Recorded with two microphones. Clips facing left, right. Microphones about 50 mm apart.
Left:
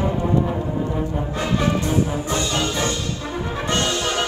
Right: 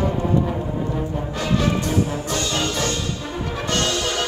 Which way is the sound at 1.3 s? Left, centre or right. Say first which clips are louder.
Even; left.